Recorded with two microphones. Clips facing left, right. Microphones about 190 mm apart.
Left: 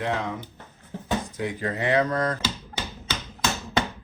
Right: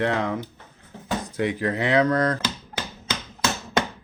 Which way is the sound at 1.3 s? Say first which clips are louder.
Right 4 dB; 75° right (ahead or behind).